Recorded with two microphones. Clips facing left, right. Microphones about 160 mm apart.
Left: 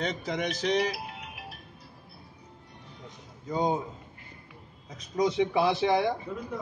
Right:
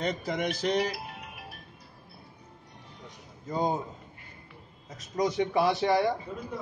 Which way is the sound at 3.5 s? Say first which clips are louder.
Left 1 dB; 20° left (ahead or behind).